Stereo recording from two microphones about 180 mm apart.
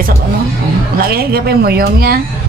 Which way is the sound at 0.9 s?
55° right (ahead or behind).